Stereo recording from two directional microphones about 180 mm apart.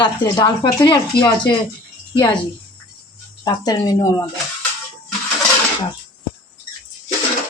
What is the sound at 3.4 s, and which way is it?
Speech, 20° left (ahead or behind).